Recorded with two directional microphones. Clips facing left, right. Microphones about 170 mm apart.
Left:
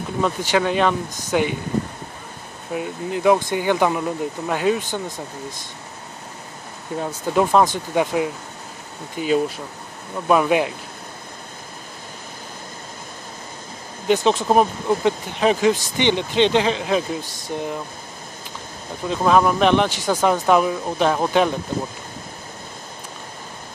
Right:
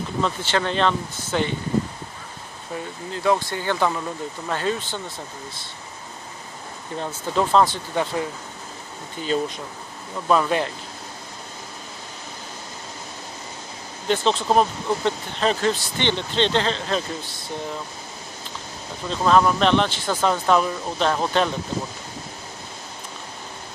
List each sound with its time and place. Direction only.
0.2 s speech: 10° left (ahead or behind)
2.7 s speech: 15° left (ahead or behind)
7.0 s speech: 10° left (ahead or behind)
14.0 s speech: 15° left (ahead or behind)
19.0 s speech: 10° left (ahead or behind)